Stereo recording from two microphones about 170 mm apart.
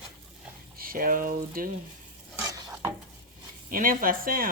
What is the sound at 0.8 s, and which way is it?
Speech, 60° right (ahead or behind).